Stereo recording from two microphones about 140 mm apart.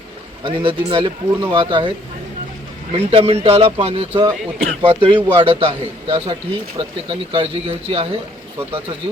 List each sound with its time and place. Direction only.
0.4 s speech: 40° right (ahead or behind)
2.9 s speech: 45° right (ahead or behind)